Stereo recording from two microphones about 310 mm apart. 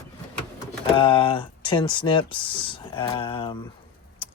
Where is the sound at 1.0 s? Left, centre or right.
Centre.